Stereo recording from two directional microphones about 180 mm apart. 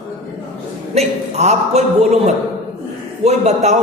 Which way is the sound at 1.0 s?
35° right (ahead or behind).